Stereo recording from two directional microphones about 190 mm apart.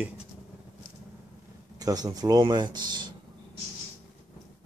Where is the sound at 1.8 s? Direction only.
20° right (ahead or behind).